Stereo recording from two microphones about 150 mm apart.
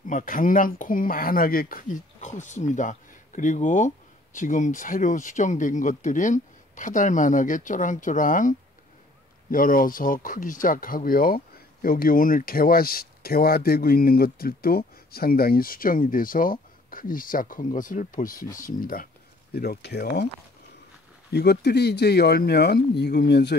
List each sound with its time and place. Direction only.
0.1 s speech: 65° left (ahead or behind)
19.5 s speech: 90° left
21.3 s speech: 90° left